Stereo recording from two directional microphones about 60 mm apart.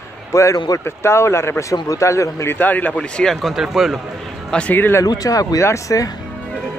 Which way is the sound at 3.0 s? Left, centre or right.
Centre.